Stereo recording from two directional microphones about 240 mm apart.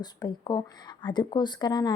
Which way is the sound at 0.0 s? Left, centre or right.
Centre.